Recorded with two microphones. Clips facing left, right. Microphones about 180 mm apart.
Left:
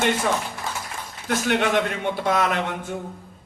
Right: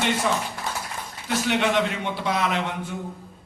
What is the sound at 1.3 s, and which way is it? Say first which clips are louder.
A man's voice: left 1 dB; 50° left (ahead or behind).